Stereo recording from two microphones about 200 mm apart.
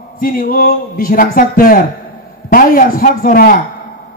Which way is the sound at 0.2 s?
45° left (ahead or behind).